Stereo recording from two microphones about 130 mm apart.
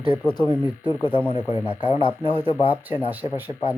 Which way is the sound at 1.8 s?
40° left (ahead or behind).